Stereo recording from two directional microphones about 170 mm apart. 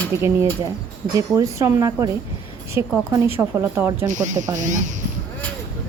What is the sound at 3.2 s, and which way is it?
Speech, 15° right (ahead or behind).